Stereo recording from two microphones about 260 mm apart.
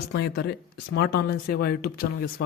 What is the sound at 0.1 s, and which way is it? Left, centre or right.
Speech, left.